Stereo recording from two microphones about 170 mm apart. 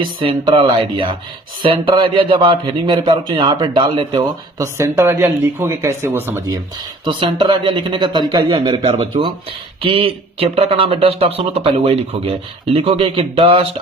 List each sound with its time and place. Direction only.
0.0 s speech: 30° right (ahead or behind)
4.5 s speech: 15° right (ahead or behind)
7.0 s speech: 25° right (ahead or behind)